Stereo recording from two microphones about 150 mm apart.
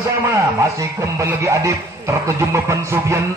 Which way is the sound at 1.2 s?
20° right (ahead or behind).